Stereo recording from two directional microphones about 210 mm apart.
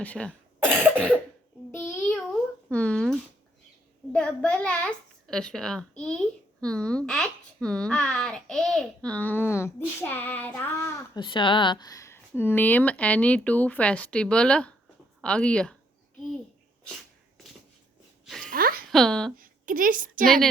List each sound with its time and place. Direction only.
0.0 s cough: 5° left (ahead or behind)
1.7 s child singing: 10° left (ahead or behind)
2.0 s a sound: centre (ahead or behind)
4.1 s a child's voice: 5° left (ahead or behind)
18.3 s a sound: centre (ahead or behind)
18.5 s a sound: 45° right (ahead or behind)
18.9 s speech: centre (ahead or behind)
19.4 s a woman's voice: 40° right (ahead or behind)
20.2 s female singing: centre (ahead or behind)